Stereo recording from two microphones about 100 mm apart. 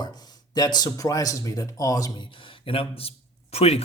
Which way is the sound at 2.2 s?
60° left (ahead or behind).